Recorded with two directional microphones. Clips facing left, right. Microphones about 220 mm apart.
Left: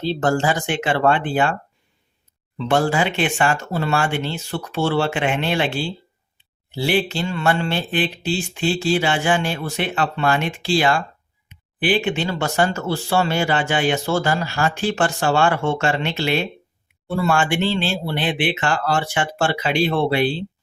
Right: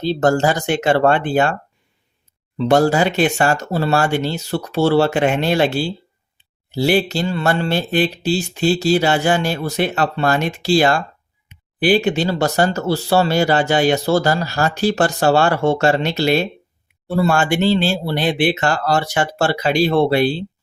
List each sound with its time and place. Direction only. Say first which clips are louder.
0.0 s speech: right 4 dB; 40° right (ahead or behind)
2.6 s speech: right 5 dB; 40° right (ahead or behind)